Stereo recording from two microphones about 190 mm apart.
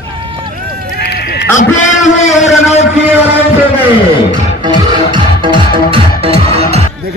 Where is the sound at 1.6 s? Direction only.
40° left (ahead or behind).